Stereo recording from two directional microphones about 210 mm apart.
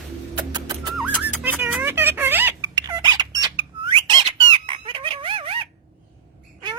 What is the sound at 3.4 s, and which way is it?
Squawk, 20° right (ahead or behind).